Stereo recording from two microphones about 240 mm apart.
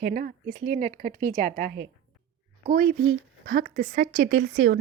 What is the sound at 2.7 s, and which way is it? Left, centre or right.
Speech, right.